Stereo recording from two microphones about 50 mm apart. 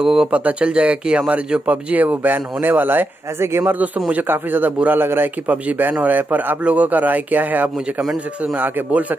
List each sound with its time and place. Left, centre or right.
0.0 s speech: centre
0.3 s a man's voice: right
1.7 s speech: right
3.3 s speech: right
3.6 s speech: right
5.5 s speech: right